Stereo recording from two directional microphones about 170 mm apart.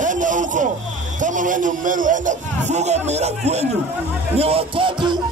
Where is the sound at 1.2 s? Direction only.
50° right (ahead or behind).